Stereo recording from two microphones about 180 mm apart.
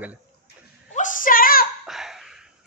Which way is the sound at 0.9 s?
45° left (ahead or behind).